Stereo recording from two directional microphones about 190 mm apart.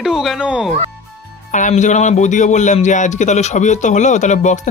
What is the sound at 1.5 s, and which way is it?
A man's voice, 40° left (ahead or behind).